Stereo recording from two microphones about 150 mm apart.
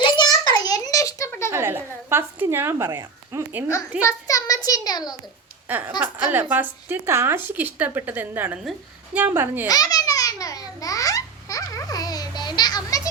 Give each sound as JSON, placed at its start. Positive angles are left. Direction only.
{"t": 0.0, "sound": "a sound", "side_deg": 25}
{"t": 1.5, "sound": "a woman's voice", "side_deg": -15}
{"t": 4.0, "sound": "a child's voice", "side_deg": 25}
{"t": 5.6, "sound": "a sound", "side_deg": -10}
{"t": 6.3, "sound": "speech", "side_deg": -15}
{"t": 9.6, "sound": "baby laughter", "side_deg": 25}